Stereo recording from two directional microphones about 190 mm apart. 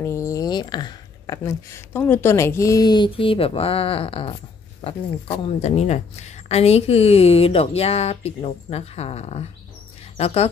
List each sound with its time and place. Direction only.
0.0 s a woman's voice: 15° left (ahead or behind); by 10.5 s 30° left (ahead or behind)